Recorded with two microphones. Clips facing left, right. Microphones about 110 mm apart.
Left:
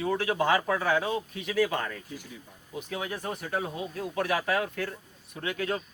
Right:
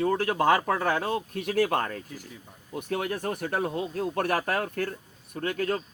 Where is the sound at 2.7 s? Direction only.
55° right (ahead or behind).